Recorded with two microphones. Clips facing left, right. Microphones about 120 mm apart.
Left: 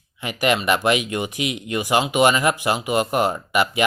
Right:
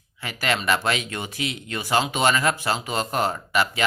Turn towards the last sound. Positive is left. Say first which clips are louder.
# left 3 dB
turn(degrees=15)  # may be behind; listen again after turning